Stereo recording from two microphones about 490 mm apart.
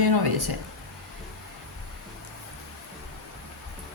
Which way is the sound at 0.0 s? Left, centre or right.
Right.